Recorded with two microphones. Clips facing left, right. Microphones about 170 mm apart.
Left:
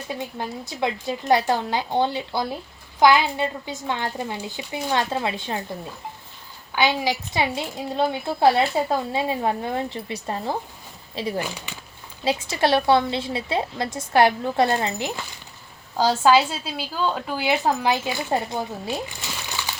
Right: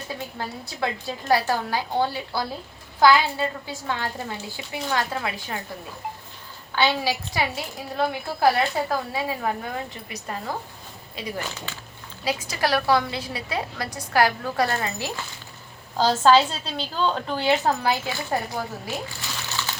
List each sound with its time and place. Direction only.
0.3 s a woman's voice: 20° left (ahead or behind)
6.7 s a woman's voice: 15° left (ahead or behind)
11.3 s a woman's voice: 15° left (ahead or behind)
12.2 s a woman's voice: 25° left (ahead or behind)